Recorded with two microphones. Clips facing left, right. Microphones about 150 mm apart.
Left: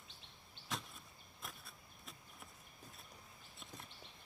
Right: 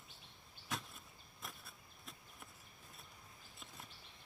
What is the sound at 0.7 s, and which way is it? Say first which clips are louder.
Arrow: even; centre (ahead or behind).